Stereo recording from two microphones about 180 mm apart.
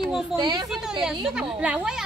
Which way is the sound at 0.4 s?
20° right (ahead or behind).